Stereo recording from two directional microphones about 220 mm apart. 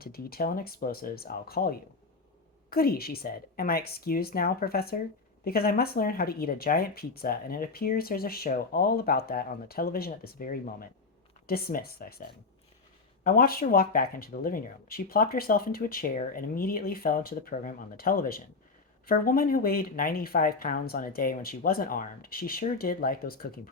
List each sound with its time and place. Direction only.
0.0 s speech: 45° left (ahead or behind)
13.2 s speech: 40° left (ahead or behind)